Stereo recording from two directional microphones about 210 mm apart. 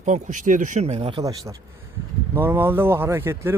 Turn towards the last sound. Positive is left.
turn(degrees=-10)  # may be behind; listen again after turning